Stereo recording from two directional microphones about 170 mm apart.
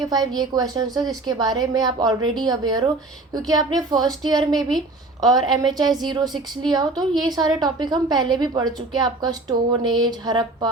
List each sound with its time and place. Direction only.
0.0 s a woman's voice: 25° right (ahead or behind)